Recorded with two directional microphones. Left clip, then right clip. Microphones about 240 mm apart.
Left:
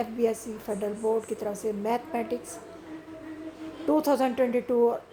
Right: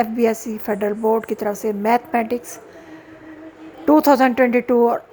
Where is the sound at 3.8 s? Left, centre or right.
Right.